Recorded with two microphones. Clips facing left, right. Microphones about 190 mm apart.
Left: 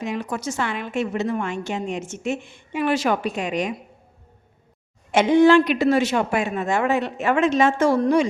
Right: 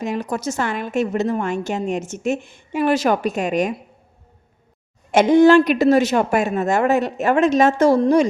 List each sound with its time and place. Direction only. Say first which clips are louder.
0.0 s a woman's voice: right 3 dB; 40° right (ahead or behind)
5.1 s a woman's voice: right 3 dB; 45° right (ahead or behind)